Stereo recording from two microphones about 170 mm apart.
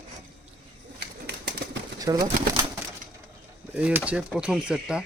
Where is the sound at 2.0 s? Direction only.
20° right (ahead or behind).